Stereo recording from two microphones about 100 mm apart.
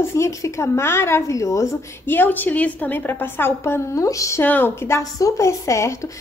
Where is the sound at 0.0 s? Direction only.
30° left (ahead or behind).